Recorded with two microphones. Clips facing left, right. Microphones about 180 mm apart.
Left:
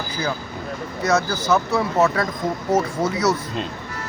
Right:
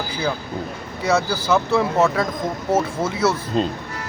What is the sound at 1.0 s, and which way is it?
Speech, 10° right (ahead or behind).